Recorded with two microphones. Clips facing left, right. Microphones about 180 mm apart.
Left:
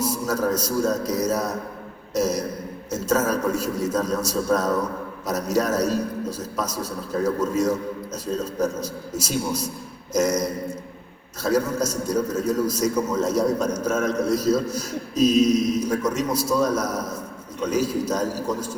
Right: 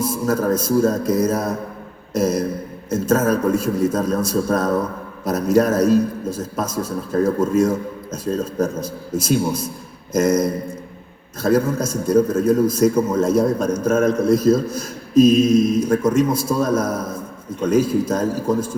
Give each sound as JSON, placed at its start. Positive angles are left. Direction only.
{"t": 0.0, "sound": "a man's voice", "side_deg": -50}